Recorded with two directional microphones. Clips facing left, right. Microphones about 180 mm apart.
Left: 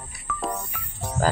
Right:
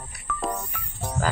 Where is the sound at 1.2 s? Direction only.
40° left (ahead or behind).